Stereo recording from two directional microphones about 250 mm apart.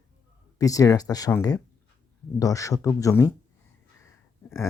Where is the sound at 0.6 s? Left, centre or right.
Centre.